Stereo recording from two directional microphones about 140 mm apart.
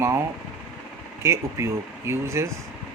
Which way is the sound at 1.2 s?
20° right (ahead or behind).